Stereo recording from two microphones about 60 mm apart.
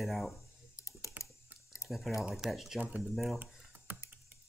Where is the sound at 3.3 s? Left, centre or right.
Right.